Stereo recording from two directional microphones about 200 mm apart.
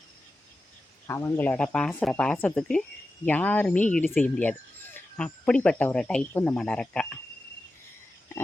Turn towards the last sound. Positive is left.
turn(degrees=5)  # may be behind; listen again after turning